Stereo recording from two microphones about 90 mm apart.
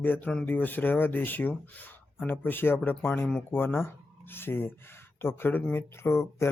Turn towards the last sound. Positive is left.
turn(degrees=30)  # may be behind; listen again after turning